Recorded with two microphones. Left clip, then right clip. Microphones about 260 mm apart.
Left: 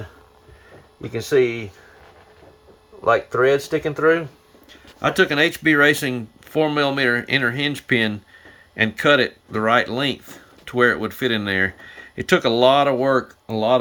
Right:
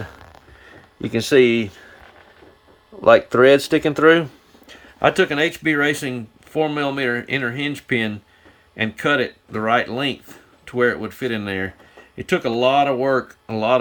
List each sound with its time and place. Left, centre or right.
1.1 s speech: right
3.0 s speech: right
4.9 s speech: centre